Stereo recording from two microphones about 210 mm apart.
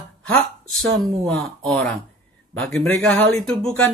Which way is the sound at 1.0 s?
Centre (ahead or behind).